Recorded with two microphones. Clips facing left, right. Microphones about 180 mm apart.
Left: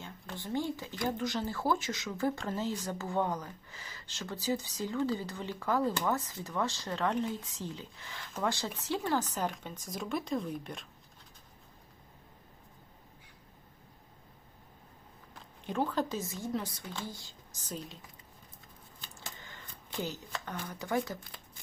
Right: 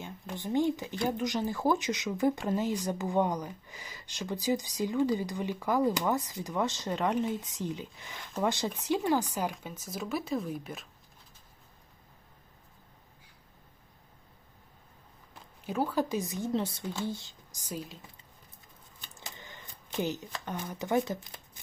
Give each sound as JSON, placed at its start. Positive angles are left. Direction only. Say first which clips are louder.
{"t": 0.0, "sound": "speech", "louder": "right 4 dB", "side_deg": -15}
{"t": 15.6, "sound": "speech", "louder": "right 2 dB", "side_deg": -10}
{"t": 19.2, "sound": "speech", "louder": "right 2 dB", "side_deg": -20}